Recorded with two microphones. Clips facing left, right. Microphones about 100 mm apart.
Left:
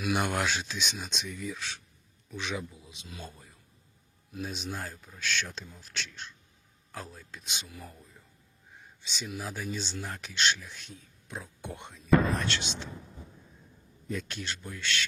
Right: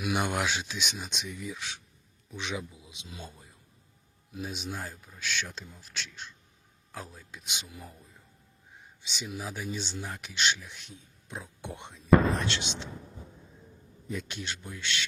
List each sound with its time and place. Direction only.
0.0 s speech: 15° right (ahead or behind)
9.0 s speech: 15° right (ahead or behind)
14.1 s speech: 15° right (ahead or behind)